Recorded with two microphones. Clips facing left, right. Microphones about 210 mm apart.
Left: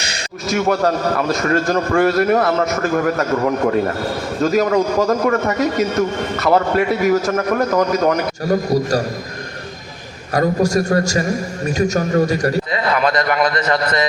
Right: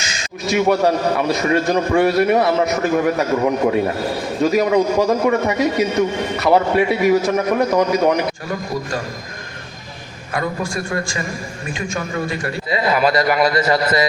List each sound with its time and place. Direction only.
0.0 s a sound: 60° left (ahead or behind)
0.7 s a man's voice: centre (ahead or behind)
8.4 s a man's voice: 40° left (ahead or behind)
10.3 s a man's voice: 40° left (ahead or behind)
12.7 s a man's voice: 5° right (ahead or behind)